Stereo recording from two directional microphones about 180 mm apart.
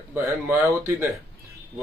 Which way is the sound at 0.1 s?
15° right (ahead or behind).